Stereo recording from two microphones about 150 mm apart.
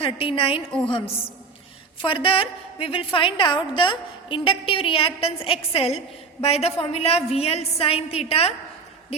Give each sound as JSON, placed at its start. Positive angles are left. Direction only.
{"t": 0.0, "sound": "a woman's voice", "side_deg": 35}